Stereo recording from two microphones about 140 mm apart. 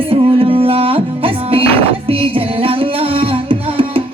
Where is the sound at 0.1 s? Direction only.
40° right (ahead or behind).